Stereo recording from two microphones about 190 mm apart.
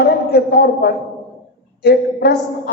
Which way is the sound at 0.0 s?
55° left (ahead or behind).